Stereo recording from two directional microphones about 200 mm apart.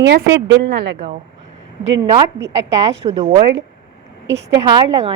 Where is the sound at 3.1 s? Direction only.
25° right (ahead or behind).